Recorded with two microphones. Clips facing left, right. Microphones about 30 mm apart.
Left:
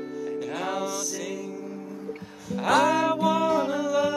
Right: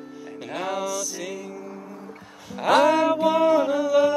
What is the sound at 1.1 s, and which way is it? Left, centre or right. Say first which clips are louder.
Music: even; centre.